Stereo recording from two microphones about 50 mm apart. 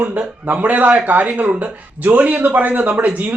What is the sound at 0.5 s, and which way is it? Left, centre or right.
Speech, right.